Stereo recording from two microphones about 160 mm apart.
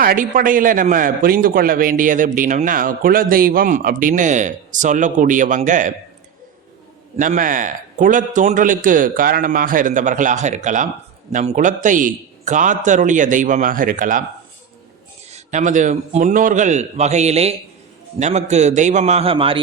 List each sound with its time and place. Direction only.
0.0 s a man's voice: 65° right (ahead or behind)
7.2 s a man's voice: 55° right (ahead or behind)
15.3 s a man's voice: 50° right (ahead or behind); by 19.6 s 35° right (ahead or behind)